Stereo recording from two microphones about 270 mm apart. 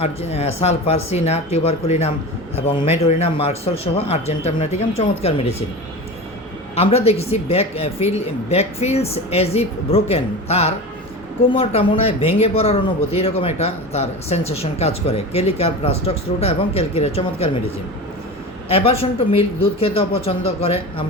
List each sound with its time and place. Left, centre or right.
0.0 s speech: left
6.7 s speech: left
18.7 s speech: left